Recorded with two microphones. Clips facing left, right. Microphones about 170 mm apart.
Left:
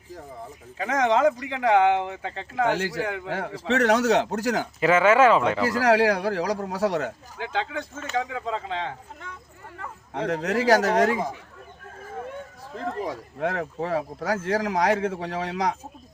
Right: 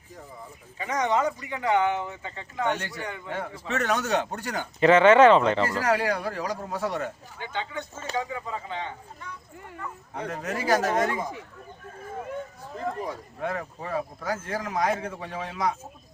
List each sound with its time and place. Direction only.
0.8 s speech: 90° left
4.8 s speech: 5° left (ahead or behind)
5.6 s speech: 90° left
8.1 s speech: 75° left (ahead or behind); by 11.3 s 90° left
13.1 s speech: 85° left